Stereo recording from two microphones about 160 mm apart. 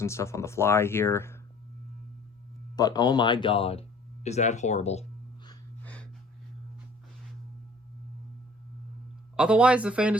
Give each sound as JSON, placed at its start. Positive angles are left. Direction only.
{"t": 0.0, "sound": "speech", "side_deg": 15}
{"t": 2.7, "sound": "speech", "side_deg": 25}
{"t": 5.8, "sound": "gasp", "side_deg": 10}
{"t": 9.3, "sound": "speech", "side_deg": -5}